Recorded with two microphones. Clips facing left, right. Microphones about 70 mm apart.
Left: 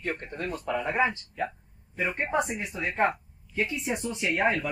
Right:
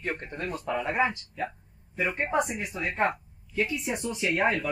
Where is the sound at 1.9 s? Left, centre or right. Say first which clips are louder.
Right 1 dB; left.